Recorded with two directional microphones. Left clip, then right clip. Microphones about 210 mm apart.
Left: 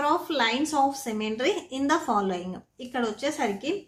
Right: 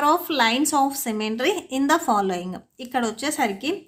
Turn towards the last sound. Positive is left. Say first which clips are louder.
# right 4 dB
turn(degrees=-35)  # may be behind; listen again after turning